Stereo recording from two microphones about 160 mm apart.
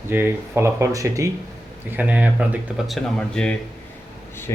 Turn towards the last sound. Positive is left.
turn(degrees=20)  # may be behind; listen again after turning